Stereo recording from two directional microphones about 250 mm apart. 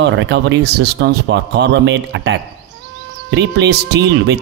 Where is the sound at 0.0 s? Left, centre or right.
Right.